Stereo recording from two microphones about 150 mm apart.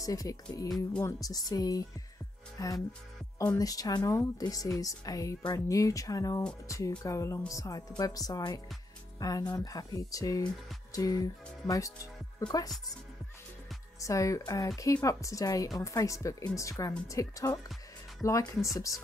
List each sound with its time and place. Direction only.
0.0 s speech: 25° left (ahead or behind)
14.0 s speech: 20° left (ahead or behind)